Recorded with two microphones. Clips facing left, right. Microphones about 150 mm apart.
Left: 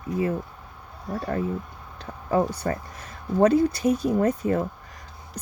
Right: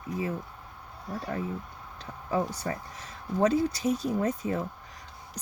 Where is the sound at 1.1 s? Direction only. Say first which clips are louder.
Left 6 dB; 55° left (ahead or behind).